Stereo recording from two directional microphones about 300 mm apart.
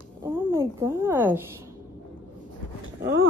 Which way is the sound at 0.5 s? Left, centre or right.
Centre.